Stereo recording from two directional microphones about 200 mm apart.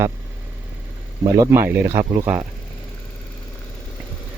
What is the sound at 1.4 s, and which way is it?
Speech, 10° right (ahead or behind).